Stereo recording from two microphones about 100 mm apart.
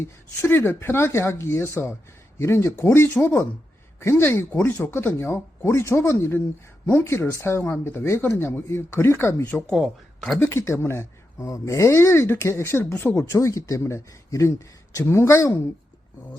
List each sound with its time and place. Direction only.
0.0 s speech: 25° left (ahead or behind)
9.7 s speech: centre (ahead or behind)
10.3 s speech: 25° left (ahead or behind)